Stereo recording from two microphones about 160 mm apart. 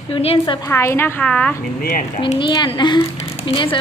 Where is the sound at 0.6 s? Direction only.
15° left (ahead or behind).